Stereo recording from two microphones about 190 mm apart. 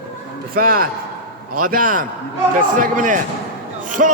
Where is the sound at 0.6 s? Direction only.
50° right (ahead or behind).